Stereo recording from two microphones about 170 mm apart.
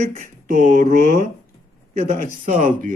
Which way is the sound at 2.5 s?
45° right (ahead or behind).